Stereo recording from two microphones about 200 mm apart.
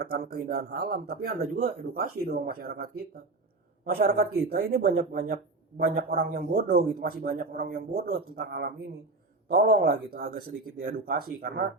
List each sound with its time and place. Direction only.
0.0 s speech: 50° right (ahead or behind)